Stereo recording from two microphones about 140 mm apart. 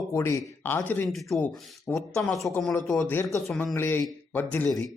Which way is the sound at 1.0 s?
Centre (ahead or behind).